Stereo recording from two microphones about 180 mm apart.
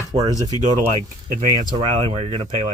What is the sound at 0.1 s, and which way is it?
Speech, 25° right (ahead or behind).